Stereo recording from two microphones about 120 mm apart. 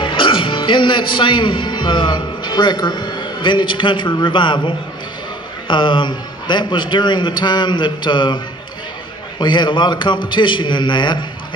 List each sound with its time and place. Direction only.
0.0 s a man's voice: 45° left (ahead or behind)
9.4 s a man's voice: 40° left (ahead or behind)